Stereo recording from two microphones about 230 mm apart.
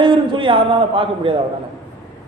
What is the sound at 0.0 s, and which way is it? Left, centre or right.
A man's voice, right.